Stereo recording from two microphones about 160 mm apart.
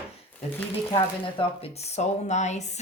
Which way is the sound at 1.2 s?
35° left (ahead or behind).